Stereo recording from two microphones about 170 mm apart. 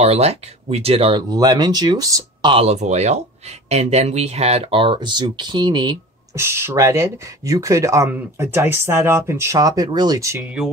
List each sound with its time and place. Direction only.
0.0 s speech: 35° right (ahead or behind); by 2.5 s 20° right (ahead or behind)
2.5 s speech: 40° right (ahead or behind)
6.3 s speech: 15° right (ahead or behind)